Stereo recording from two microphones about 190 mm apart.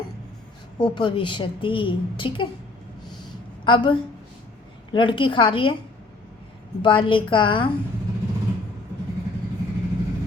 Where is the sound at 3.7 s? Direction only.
25° left (ahead or behind).